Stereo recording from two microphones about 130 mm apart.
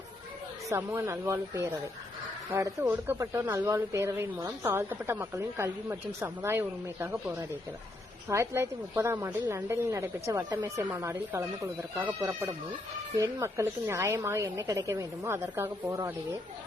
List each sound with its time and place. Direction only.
0.7 s speech: 20° right (ahead or behind)